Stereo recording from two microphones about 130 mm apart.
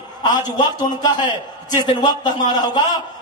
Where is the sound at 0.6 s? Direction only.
35° left (ahead or behind).